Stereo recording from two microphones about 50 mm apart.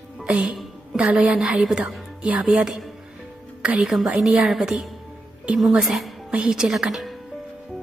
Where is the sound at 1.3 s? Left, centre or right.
Centre.